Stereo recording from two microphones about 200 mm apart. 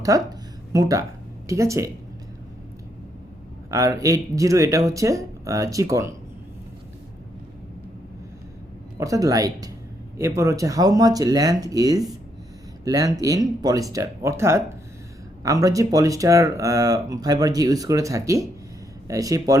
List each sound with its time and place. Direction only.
0.0 s a sound: 15° right (ahead or behind)
1.5 s speech: 15° right (ahead or behind)
3.7 s speech: 15° right (ahead or behind)
9.0 s speech: 15° right (ahead or behind)